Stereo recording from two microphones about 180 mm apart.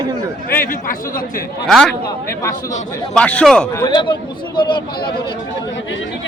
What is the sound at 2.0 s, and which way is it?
Speech, 20° left (ahead or behind).